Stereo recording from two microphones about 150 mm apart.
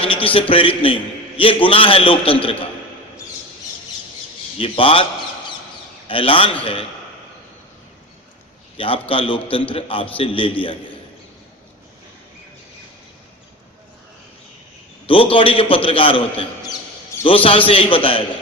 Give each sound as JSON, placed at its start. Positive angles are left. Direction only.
{"t": 0.0, "sound": "a man's voice", "side_deg": 35}
{"t": 4.5, "sound": "a man's voice", "side_deg": 40}
{"t": 6.1, "sound": "a man's voice", "side_deg": 35}
{"t": 8.8, "sound": "a man's voice", "side_deg": 35}
{"t": 15.0, "sound": "a man's voice", "side_deg": 35}